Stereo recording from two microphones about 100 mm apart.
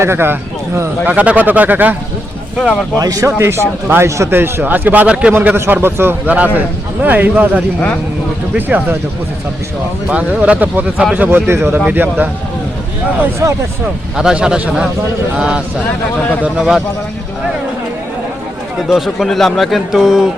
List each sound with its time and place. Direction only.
0.0 s speech: 25° right (ahead or behind)
3.0 s speech: 35° right (ahead or behind); by 9.0 s 20° right (ahead or behind)
10.1 s speech: 10° right (ahead or behind)
13.4 s speech: 30° right (ahead or behind)
14.2 s speech: 5° right (ahead or behind)
18.9 s speech: 5° right (ahead or behind)